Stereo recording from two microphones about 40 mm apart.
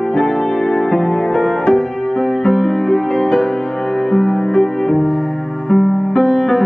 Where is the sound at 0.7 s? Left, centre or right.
Centre.